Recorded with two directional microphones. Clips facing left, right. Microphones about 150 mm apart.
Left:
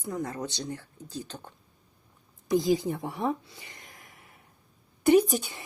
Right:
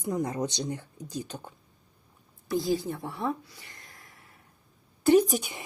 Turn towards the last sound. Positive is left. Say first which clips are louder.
# right 2 dB
turn(degrees=-15)  # may be behind; listen again after turning